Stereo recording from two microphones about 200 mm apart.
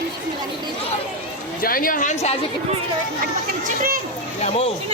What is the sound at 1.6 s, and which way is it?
Speech, 45° left (ahead or behind).